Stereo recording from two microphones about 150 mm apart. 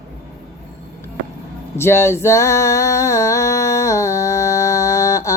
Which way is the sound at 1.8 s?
15° left (ahead or behind).